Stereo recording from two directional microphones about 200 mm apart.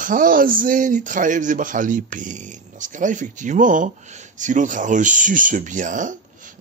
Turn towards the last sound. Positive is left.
turn(degrees=-40)  # may be behind; listen again after turning